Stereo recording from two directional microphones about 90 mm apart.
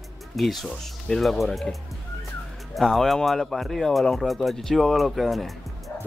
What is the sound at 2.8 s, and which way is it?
Speech, 5° left (ahead or behind).